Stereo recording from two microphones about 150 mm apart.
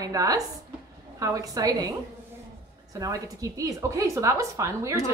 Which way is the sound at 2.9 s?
20° right (ahead or behind).